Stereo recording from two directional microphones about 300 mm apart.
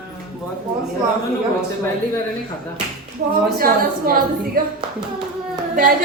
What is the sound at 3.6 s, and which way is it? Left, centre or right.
A woman's voice, right.